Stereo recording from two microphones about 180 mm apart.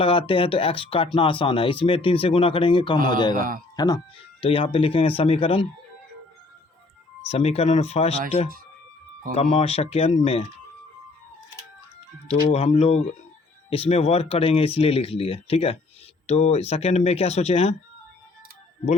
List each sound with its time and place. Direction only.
0.0 s speech: 30° left (ahead or behind)
3.3 s speech: 50° right (ahead or behind)
3.8 s speech: 20° left (ahead or behind)
7.3 s speech: 35° left (ahead or behind)
9.3 s speech: 35° left (ahead or behind)
12.5 s speech: 35° left (ahead or behind)